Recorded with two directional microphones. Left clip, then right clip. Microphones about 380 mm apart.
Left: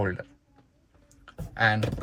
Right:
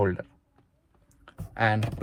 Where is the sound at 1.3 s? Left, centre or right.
Centre.